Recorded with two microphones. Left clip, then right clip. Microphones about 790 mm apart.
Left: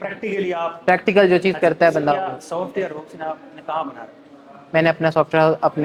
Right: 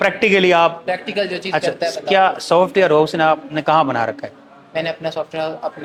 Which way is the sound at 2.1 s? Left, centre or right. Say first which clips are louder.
Right 11 dB; right.